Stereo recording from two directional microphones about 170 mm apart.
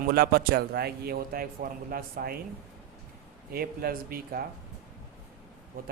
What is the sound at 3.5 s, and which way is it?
Speech, 60° right (ahead or behind).